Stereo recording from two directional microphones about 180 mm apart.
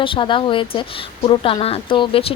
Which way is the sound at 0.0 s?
30° left (ahead or behind).